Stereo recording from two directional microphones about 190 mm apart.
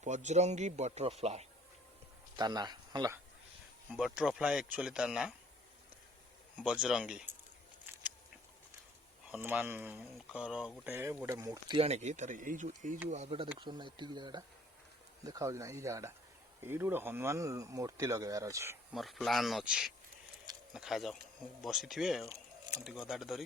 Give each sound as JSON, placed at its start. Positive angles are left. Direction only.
{"t": 0.0, "sound": "a man's voice", "side_deg": -40}
{"t": 2.3, "sound": "speech", "side_deg": -20}
{"t": 3.9, "sound": "speech", "side_deg": -5}
{"t": 6.7, "sound": "speech", "side_deg": -5}
{"t": 9.3, "sound": "speech", "side_deg": -10}
{"t": 11.8, "sound": "a man's voice", "side_deg": -35}
{"t": 18.9, "sound": "speech", "side_deg": 0}
{"t": 22.3, "sound": "a sound", "side_deg": -20}
{"t": 22.8, "sound": "speech", "side_deg": 0}